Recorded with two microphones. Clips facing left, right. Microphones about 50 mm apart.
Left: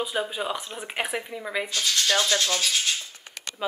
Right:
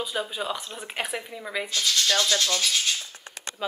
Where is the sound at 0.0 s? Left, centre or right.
Centre.